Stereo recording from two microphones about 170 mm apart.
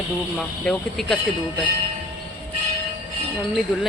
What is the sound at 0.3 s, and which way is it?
Speech, 5° left (ahead or behind).